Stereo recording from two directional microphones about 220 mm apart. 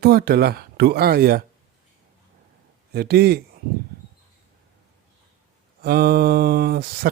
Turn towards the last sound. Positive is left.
turn(degrees=-45)  # may be behind; listen again after turning